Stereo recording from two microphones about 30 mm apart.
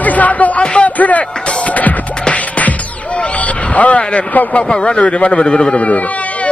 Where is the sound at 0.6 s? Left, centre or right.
Left.